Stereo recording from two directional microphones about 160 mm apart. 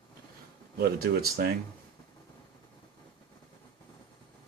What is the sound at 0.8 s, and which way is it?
Speech, 75° right (ahead or behind).